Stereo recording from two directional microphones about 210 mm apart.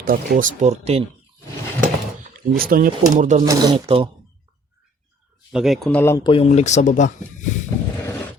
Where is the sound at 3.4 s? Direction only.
20° right (ahead or behind).